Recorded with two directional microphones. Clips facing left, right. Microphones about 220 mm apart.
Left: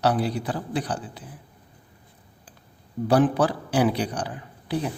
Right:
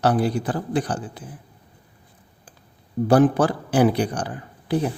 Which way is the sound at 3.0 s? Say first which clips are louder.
Right 3 dB; 45° right (ahead or behind).